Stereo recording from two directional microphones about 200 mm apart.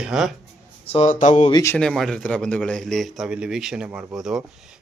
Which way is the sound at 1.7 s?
Centre (ahead or behind).